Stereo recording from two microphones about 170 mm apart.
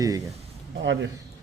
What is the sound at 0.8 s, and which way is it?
Speech, 90° right.